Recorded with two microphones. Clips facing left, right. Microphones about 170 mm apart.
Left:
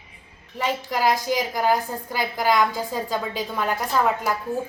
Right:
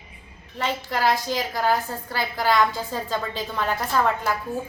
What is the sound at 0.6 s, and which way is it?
A woman's voice, 10° left (ahead or behind).